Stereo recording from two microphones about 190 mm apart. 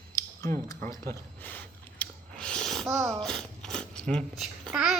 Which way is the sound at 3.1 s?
5° left (ahead or behind).